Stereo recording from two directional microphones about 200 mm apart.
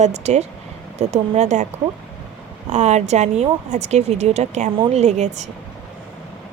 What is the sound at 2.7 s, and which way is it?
Speech, 35° right (ahead or behind).